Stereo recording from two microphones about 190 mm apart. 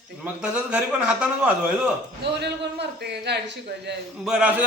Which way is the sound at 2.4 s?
60° right (ahead or behind).